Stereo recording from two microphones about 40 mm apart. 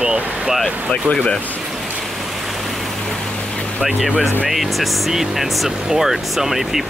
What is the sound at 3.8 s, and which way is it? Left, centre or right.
Speech, right.